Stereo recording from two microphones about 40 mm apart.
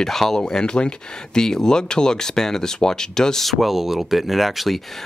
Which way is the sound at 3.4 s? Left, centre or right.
Centre.